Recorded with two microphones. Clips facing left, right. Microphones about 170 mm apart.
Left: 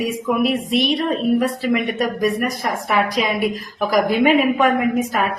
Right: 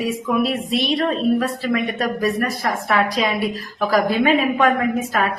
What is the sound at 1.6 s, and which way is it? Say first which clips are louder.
A woman's voice: left 2 dB; 10° left (ahead or behind).